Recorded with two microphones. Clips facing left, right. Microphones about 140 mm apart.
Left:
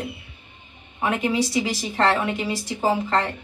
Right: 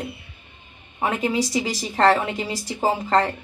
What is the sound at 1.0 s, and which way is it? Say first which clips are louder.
Speech: even; 35° right (ahead or behind).